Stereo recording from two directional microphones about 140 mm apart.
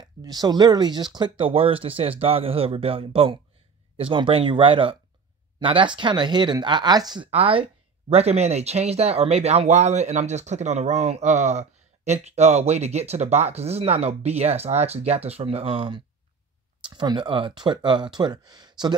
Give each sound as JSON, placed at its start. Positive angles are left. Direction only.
{"t": 0.0, "sound": "speech", "side_deg": -30}
{"t": 7.2, "sound": "speech", "side_deg": -45}